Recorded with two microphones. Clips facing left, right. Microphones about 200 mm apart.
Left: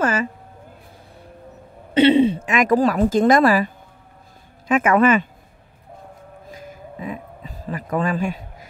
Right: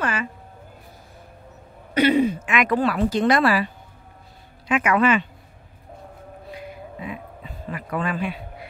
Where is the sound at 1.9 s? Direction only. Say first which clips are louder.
Left 4 dB; 30° left (ahead or behind); by 3.6 s 45° left (ahead or behind).